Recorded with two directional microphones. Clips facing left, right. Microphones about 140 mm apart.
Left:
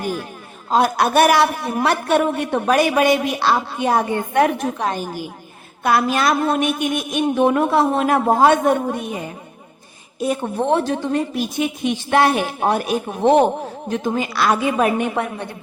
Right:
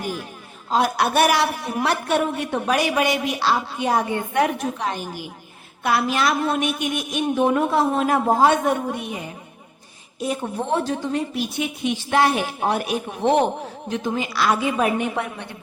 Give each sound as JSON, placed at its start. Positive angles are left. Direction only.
{"t": 0.7, "sound": "a woman's voice", "side_deg": 50}
{"t": 10.2, "sound": "a woman's voice", "side_deg": 60}